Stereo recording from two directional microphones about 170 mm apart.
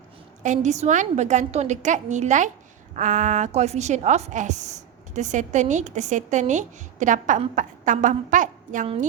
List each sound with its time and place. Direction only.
0.4 s a woman's voice: 45° right (ahead or behind)